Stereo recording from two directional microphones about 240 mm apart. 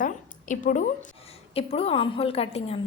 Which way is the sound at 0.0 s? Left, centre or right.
Left.